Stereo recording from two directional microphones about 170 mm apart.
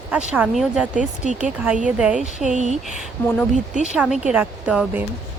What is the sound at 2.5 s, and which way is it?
Speech, 45° right (ahead or behind).